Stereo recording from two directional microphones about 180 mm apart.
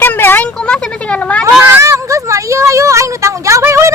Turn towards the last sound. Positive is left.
turn(degrees=-15)  # may be behind; listen again after turning